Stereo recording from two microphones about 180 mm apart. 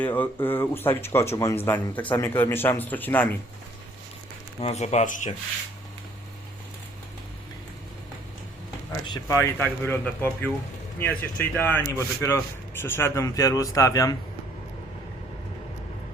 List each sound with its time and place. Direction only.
0.0 s speech: 10° left (ahead or behind)
4.6 s speech: 40° left (ahead or behind)
9.0 s speech: 25° left (ahead or behind)